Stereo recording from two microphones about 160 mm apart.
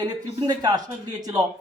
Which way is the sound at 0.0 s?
25° right (ahead or behind).